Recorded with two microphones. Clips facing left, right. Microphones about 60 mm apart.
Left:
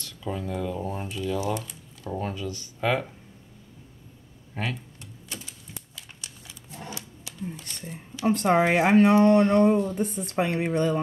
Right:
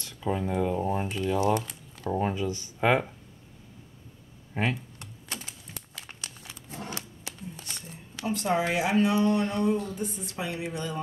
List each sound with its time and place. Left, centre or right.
0.0 s speech: centre
4.6 s speech: centre
4.9 s typing: right
5.9 s a sound: right
7.9 s speech: left